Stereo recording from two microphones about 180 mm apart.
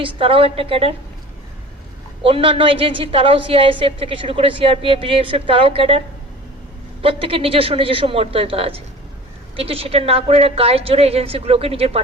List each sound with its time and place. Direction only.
0.0 s a woman's voice: 30° right (ahead or behind)
2.2 s a woman's voice: 30° right (ahead or behind)
7.0 s a woman's voice: 30° right (ahead or behind)